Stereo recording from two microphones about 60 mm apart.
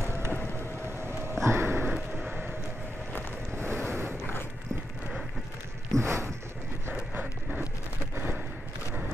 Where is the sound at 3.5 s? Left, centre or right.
Right.